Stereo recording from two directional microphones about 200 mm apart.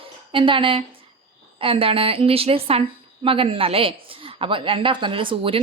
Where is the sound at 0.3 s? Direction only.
25° right (ahead or behind).